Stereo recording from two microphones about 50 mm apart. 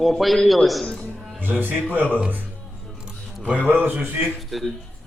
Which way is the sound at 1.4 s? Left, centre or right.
Right.